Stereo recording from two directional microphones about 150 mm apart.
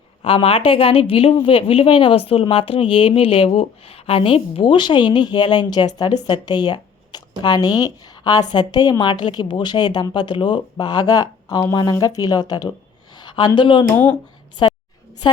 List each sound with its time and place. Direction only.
0.2 s a woman's voice: 40° left (ahead or behind)
13.9 s speech: 10° left (ahead or behind)